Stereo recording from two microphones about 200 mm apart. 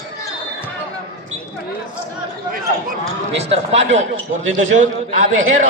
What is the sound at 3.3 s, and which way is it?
A man's voice, 30° right (ahead or behind).